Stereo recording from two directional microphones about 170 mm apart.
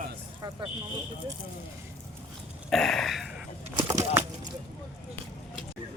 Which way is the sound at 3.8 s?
20° right (ahead or behind).